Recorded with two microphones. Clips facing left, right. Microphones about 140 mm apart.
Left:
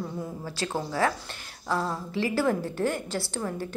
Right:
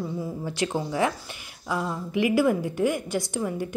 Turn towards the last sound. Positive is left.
turn(degrees=-15)  # may be behind; listen again after turning